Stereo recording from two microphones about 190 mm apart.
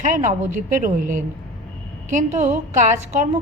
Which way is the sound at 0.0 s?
40° right (ahead or behind).